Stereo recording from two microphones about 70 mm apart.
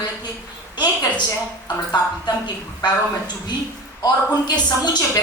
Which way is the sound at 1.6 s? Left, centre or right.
Left.